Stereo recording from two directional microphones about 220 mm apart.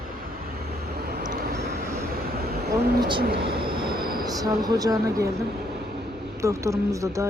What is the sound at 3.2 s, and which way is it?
Speech, 50° right (ahead or behind).